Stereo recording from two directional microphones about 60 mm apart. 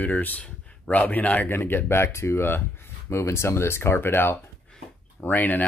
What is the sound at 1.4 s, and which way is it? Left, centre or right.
Speech, left.